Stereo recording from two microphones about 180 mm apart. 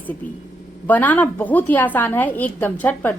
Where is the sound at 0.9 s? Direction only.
10° left (ahead or behind).